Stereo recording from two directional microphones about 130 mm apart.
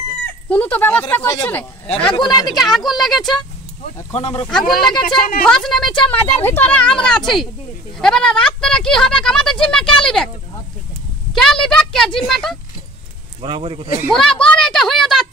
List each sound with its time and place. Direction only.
0.5 s speech: 15° left (ahead or behind)
1.6 s speech: 10° left (ahead or behind)
4.2 s speech: 35° left (ahead or behind)
4.5 s speech: 5° left (ahead or behind)
11.3 s a woman's voice: 5° left (ahead or behind)
13.4 s speech: 45° right (ahead or behind)
14.1 s a sound: 5° left (ahead or behind)